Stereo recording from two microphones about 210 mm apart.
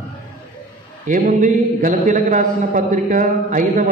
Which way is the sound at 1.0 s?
40° right (ahead or behind).